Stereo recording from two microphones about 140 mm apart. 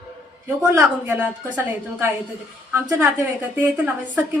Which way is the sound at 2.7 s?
15° right (ahead or behind).